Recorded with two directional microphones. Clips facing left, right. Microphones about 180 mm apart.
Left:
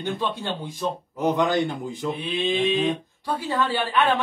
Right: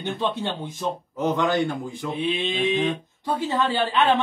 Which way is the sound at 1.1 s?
15° left (ahead or behind).